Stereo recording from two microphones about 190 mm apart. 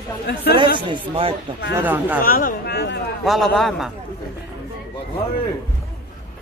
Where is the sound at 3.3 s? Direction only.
Centre (ahead or behind).